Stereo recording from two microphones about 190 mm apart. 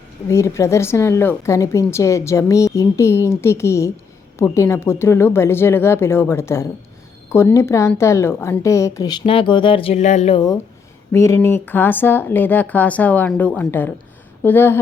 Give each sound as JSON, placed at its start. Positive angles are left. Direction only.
{"t": 0.3, "sound": "a woman's voice", "side_deg": 15}
{"t": 11.1, "sound": "a woman's voice", "side_deg": 15}